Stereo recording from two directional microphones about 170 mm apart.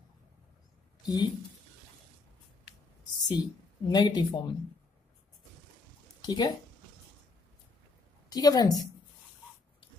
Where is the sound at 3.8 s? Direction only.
25° left (ahead or behind).